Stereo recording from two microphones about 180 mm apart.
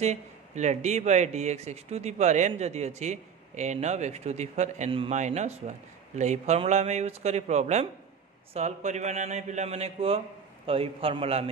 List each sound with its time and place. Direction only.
0.0 s speech: 40° right (ahead or behind)